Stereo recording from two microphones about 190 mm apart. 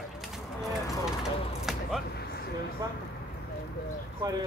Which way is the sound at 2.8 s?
20° right (ahead or behind).